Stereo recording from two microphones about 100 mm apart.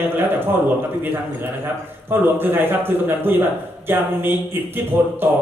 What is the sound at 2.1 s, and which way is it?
A man's voice, 20° right (ahead or behind).